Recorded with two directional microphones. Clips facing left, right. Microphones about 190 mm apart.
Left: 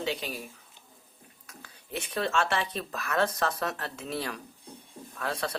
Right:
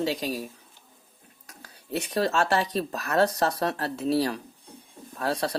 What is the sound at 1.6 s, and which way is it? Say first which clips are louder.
Speech: right 6 dB; 40° right (ahead or behind).